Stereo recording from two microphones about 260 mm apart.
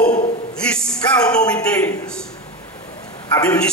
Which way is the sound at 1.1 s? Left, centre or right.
Centre.